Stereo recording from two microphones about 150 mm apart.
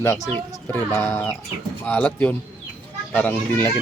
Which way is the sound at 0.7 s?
15° left (ahead or behind).